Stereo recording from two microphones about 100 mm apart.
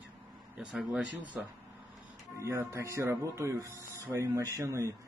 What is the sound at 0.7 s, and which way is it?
Speech, 5° right (ahead or behind).